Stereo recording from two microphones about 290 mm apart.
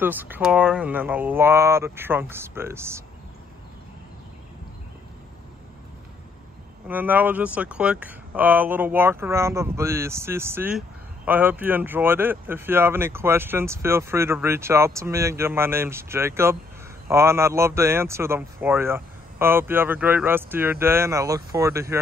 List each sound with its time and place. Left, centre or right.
0.0 s speech: centre
6.9 s speech: centre